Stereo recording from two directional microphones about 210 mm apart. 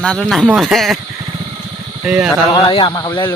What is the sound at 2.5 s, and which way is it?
Speech, 25° left (ahead or behind).